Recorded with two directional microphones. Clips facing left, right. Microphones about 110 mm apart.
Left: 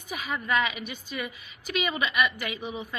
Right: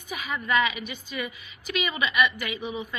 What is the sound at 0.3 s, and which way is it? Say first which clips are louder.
A woman's voice: right 2 dB; 45° left (ahead or behind).